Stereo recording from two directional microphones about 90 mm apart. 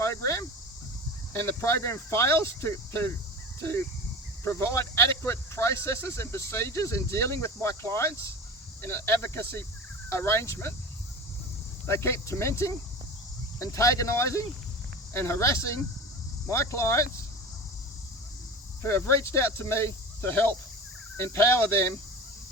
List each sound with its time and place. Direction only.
0.0 s cricket: 35° left (ahead or behind)
1.3 s speech: 30° left (ahead or behind)
4.4 s speech: 30° left (ahead or behind)
11.9 s speech: 30° left (ahead or behind)
18.8 s speech: 25° left (ahead or behind)